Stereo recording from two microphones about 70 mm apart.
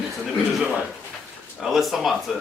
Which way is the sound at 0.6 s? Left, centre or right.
Centre.